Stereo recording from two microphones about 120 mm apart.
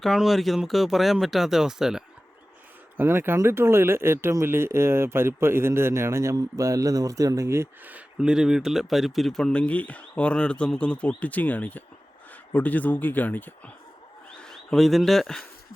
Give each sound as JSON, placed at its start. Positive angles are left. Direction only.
{"t": 0.0, "sound": "speech", "side_deg": 0}
{"t": 3.0, "sound": "speech", "side_deg": -20}
{"t": 14.4, "sound": "speech", "side_deg": 5}